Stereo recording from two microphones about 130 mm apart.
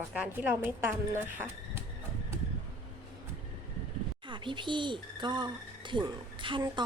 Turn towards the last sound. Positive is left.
turn(degrees=-35)  # may be behind; listen again after turning